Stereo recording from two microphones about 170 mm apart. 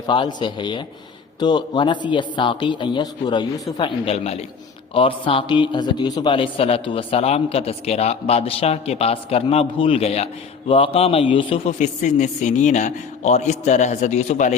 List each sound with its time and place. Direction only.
0.1 s a man's voice: 25° left (ahead or behind); by 14.5 s 40° left (ahead or behind)